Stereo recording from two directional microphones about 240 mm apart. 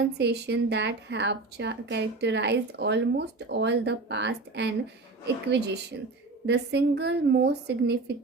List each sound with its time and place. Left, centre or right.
0.0 s a woman's voice: right